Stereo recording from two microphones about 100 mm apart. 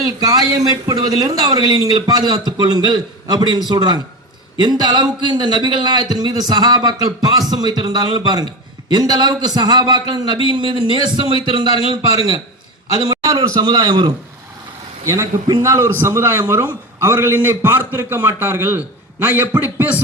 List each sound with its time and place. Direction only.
0.2 s a man's voice: 40° right (ahead or behind); by 11.7 s 55° right (ahead or behind)
13.1 s a man's voice: 35° right (ahead or behind)
15.0 s a man's voice: 30° right (ahead or behind)